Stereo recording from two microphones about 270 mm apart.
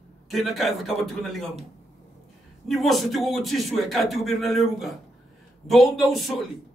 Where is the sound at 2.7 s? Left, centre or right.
Centre.